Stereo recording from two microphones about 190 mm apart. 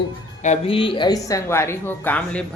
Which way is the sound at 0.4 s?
35° left (ahead or behind).